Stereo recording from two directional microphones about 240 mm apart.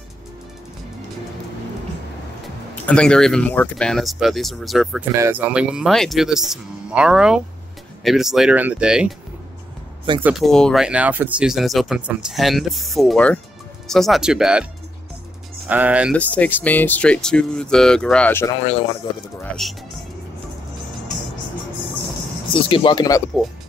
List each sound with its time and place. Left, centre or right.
2.7 s speech: centre
10.2 s speech: centre
16.2 s speech: centre
22.5 s speech: left